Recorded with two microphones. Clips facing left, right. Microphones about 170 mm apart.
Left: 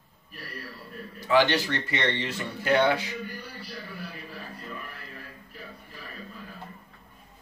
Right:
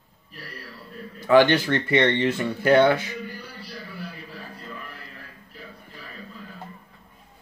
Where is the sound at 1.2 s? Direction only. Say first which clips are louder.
Right 6 dB; 55° right (ahead or behind).